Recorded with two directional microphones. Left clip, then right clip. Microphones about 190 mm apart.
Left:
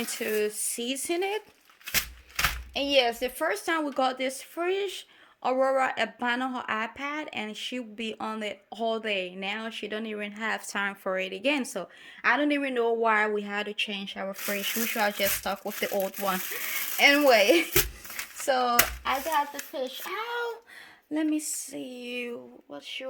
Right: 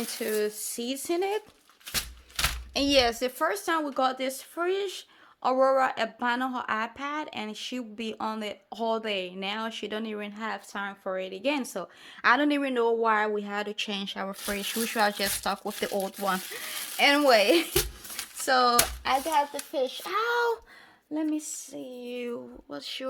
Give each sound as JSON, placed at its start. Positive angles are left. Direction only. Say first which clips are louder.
{"t": 0.0, "sound": "a woman's voice", "louder": "left 1 dB", "side_deg": -5}
{"t": 2.3, "sound": "a woman's voice", "louder": "left 1 dB", "side_deg": -25}
{"t": 10.7, "sound": "a woman's voice", "louder": "left 3 dB", "side_deg": 15}
{"t": 12.2, "sound": "speech", "louder": "right 2 dB", "side_deg": -10}
{"t": 13.1, "sound": "a woman's voice", "louder": "left 1 dB", "side_deg": 0}
{"t": 13.7, "sound": "speech", "louder": "left 1 dB", "side_deg": -15}
{"t": 18.4, "sound": "a child's voice", "louder": "right 2 dB", "side_deg": -20}
{"t": 21.1, "sound": "a woman's voice", "louder": "left 2 dB", "side_deg": 5}
{"t": 22.7, "sound": "a child's voice", "louder": "right 1 dB", "side_deg": -30}